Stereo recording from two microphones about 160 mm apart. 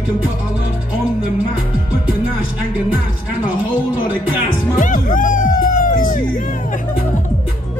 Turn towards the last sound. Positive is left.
turn(degrees=60)  # may be behind; listen again after turning